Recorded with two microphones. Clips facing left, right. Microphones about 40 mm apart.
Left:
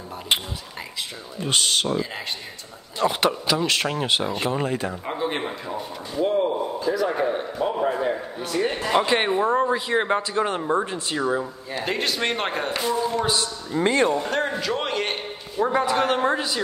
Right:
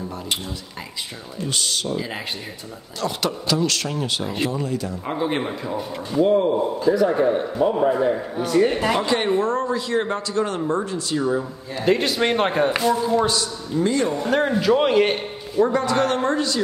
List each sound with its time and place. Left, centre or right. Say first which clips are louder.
1.5 s speech: left 3 dB; left
3.0 s a man's voice: left 3 dB; left
5.0 s a man's voice: right 3 dB; centre
8.9 s a man's voice: even; left
11.8 s a man's voice: right 6 dB; centre
13.3 s a man's voice: even; left
14.6 s a man's voice: right 8 dB; centre
15.7 s a woman's voice: right 1 dB; centre